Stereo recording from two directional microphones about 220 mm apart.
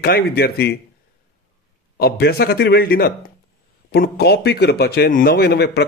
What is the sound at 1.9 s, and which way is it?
A man's voice, 45° left (ahead or behind).